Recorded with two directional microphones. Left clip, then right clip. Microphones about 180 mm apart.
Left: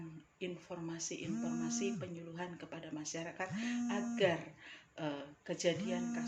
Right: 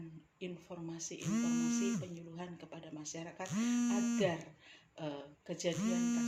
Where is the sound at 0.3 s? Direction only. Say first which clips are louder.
Left 2 dB; 15° left (ahead or behind).